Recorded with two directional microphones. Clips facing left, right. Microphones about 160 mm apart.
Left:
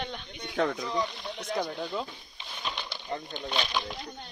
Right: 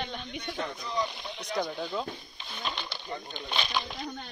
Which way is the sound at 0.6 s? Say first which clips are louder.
Left 9 dB; 90° left.